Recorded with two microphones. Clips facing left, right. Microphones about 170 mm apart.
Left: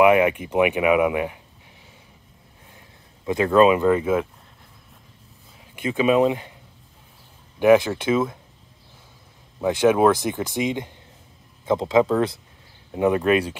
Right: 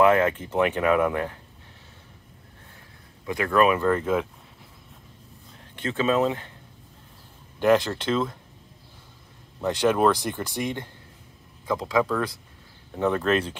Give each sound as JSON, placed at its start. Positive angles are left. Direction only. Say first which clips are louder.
{"t": 0.0, "sound": "speech", "louder": "left 3 dB", "side_deg": 15}
{"t": 3.3, "sound": "speech", "louder": "left 5 dB", "side_deg": 20}
{"t": 5.6, "sound": "speech", "louder": "left 4 dB", "side_deg": 10}
{"t": 7.5, "sound": "speech", "louder": "left 5 dB", "side_deg": 10}
{"t": 9.6, "sound": "speech", "louder": "left 4 dB", "side_deg": 10}
{"t": 12.9, "sound": "speech", "louder": "left 4 dB", "side_deg": 10}